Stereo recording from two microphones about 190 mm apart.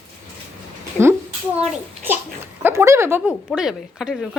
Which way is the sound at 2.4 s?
10° right (ahead or behind).